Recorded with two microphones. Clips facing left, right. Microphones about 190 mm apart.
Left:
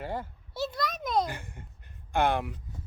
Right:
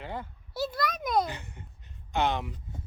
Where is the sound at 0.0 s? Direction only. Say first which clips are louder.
Left 3 dB; 45° left (ahead or behind).